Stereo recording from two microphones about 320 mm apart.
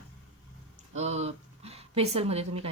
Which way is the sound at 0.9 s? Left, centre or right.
Centre.